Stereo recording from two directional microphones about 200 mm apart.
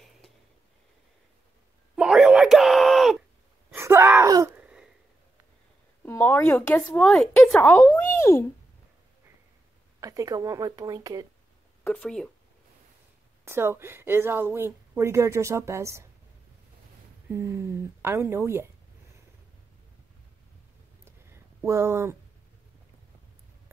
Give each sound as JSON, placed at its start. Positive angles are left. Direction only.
{"t": 2.0, "sound": "a sound", "side_deg": -5}
{"t": 3.7, "sound": "gasp", "side_deg": -10}
{"t": 6.0, "sound": "speech", "side_deg": 10}
{"t": 9.9, "sound": "a woman's voice", "side_deg": -15}
{"t": 11.8, "sound": "speech", "side_deg": 5}
{"t": 13.5, "sound": "a woman's voice", "side_deg": -10}
{"t": 17.3, "sound": "a woman's voice", "side_deg": -15}
{"t": 21.0, "sound": "a sound", "side_deg": -15}